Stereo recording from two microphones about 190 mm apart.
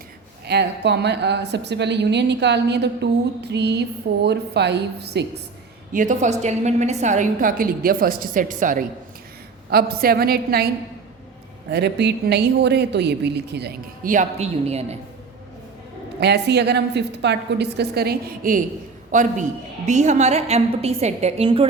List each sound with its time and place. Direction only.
0.4 s a woman's voice: 60° right (ahead or behind)
5.9 s a woman's voice: 40° right (ahead or behind)
9.6 s a woman's voice: 55° right (ahead or behind)
11.7 s a woman's voice: 65° right (ahead or behind); by 14.9 s 35° right (ahead or behind)
16.2 s a woman's voice: 60° right (ahead or behind)
19.1 s a woman's voice: 40° right (ahead or behind)